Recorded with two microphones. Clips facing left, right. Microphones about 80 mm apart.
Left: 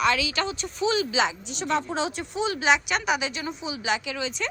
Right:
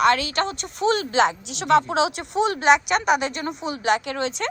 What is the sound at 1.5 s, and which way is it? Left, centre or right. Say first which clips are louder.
Speech: right 8 dB; right.